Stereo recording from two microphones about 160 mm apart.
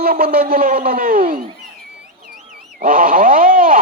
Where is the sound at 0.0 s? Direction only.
70° right (ahead or behind).